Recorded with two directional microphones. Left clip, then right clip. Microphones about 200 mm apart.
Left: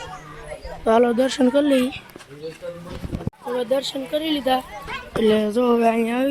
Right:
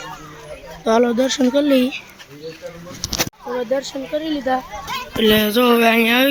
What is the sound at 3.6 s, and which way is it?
Speech, centre (ahead or behind).